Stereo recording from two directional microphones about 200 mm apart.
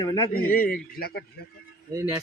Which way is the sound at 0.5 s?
45° left (ahead or behind).